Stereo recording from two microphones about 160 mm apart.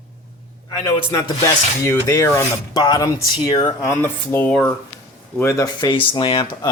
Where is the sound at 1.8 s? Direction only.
15° left (ahead or behind).